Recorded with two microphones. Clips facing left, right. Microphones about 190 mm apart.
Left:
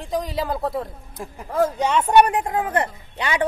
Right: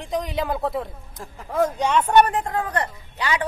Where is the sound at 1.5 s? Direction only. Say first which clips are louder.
Left 1 dB; centre (ahead or behind).